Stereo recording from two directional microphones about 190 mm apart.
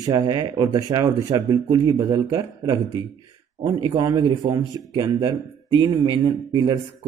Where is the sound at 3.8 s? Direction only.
20° right (ahead or behind).